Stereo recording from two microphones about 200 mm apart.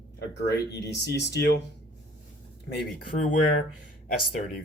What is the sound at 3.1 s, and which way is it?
Speech, 45° left (ahead or behind).